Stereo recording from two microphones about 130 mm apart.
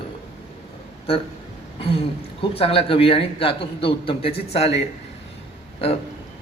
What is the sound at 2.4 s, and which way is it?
A man's voice, 45° left (ahead or behind).